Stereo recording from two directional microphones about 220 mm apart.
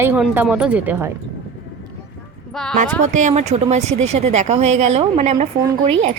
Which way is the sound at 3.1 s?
35° right (ahead or behind).